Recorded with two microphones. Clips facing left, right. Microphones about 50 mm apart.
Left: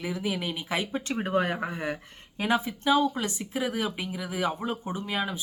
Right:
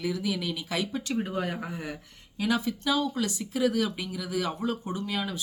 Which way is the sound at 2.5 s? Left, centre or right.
Left.